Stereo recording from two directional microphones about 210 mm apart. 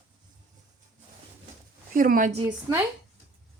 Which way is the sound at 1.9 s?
40° right (ahead or behind).